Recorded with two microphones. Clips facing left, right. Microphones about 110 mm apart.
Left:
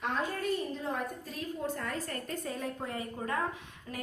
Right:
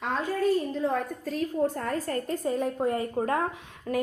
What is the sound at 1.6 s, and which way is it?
A woman's voice, 45° right (ahead or behind).